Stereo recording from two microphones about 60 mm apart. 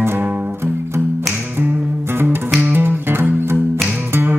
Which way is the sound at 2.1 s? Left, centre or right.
Right.